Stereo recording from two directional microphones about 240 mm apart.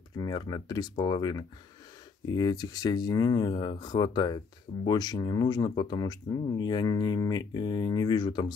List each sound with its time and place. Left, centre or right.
0.2 s speech: centre